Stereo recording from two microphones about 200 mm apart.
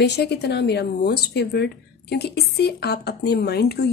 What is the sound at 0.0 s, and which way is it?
A woman's voice, 55° left (ahead or behind).